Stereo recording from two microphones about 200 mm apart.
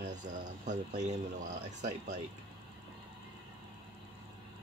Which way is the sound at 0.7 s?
35° right (ahead or behind).